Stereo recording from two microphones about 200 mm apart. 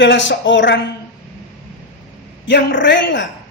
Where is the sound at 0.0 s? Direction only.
65° left (ahead or behind).